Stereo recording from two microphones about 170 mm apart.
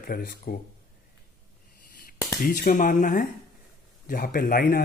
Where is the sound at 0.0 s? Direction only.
55° left (ahead or behind).